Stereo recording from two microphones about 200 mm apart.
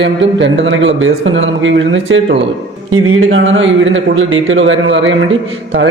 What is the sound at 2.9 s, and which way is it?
A man's voice, 90° right.